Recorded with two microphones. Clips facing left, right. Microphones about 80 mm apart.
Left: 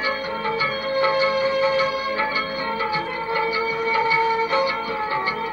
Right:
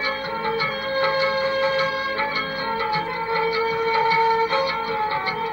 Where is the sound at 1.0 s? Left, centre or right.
Right.